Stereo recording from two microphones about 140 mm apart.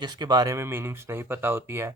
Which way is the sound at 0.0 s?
30° right (ahead or behind).